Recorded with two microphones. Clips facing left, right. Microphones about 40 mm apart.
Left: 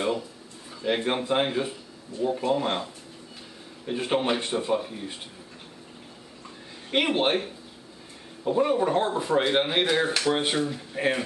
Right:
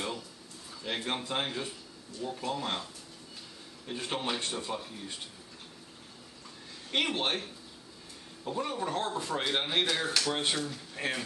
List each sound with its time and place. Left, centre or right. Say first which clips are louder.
0.8 s speech: left 9 dB; left
6.9 s speech: left 7 dB; left